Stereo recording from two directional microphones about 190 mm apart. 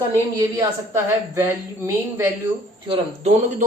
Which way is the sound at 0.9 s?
15° right (ahead or behind).